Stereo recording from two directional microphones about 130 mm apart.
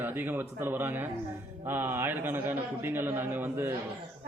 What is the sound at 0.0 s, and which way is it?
A man's voice, 15° right (ahead or behind).